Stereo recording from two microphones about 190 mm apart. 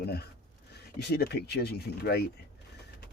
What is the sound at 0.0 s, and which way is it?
Speech, 60° left (ahead or behind).